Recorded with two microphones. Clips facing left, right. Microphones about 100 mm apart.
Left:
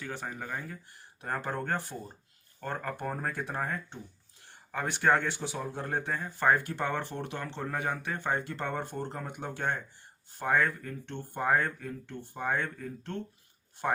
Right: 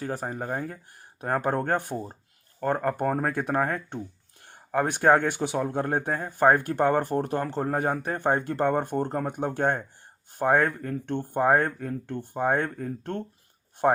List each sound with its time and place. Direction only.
0.0 s speech: 40° right (ahead or behind); by 4.0 s 60° right (ahead or behind)
4.4 s speech: 50° right (ahead or behind)